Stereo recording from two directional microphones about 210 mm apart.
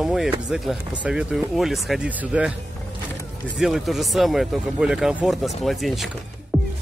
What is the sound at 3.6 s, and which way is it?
Speech, centre (ahead or behind).